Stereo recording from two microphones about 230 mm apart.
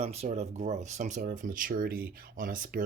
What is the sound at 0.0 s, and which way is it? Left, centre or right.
Speech, right.